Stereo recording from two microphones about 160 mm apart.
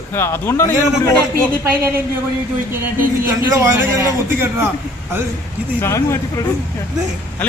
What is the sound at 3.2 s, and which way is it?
A man's voice, 15° right (ahead or behind).